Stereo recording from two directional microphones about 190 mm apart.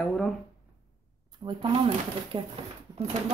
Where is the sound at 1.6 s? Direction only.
25° right (ahead or behind).